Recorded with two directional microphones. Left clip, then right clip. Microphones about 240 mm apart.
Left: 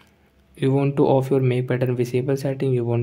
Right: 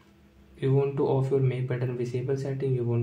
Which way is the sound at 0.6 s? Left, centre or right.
Left.